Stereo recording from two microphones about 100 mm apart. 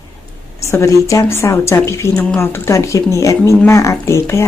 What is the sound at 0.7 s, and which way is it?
Speech, 30° left (ahead or behind).